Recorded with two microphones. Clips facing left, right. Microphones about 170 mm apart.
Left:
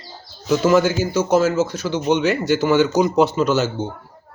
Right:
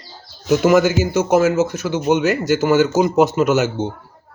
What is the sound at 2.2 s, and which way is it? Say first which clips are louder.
Speech: right 1 dB; 45° right (ahead or behind).